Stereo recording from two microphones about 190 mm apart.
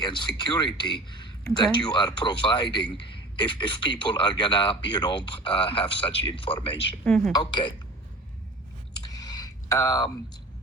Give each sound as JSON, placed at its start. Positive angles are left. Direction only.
{"t": 0.0, "sound": "speech", "side_deg": 25}
{"t": 7.0, "sound": "a woman's voice", "side_deg": 5}
{"t": 7.3, "sound": "speech", "side_deg": 25}
{"t": 9.1, "sound": "a sound", "side_deg": 20}